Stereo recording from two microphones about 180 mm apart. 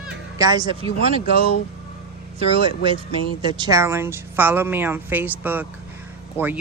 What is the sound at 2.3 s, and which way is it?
Speech, 30° right (ahead or behind).